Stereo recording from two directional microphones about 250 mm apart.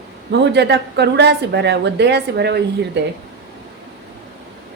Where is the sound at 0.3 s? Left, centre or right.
Right.